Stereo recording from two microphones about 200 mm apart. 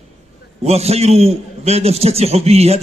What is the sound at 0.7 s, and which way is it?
A man's voice, 30° right (ahead or behind).